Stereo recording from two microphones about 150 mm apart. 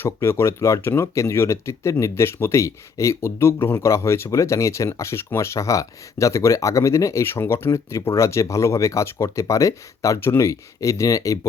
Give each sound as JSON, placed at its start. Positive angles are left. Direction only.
{"t": 0.0, "sound": "speech", "side_deg": 20}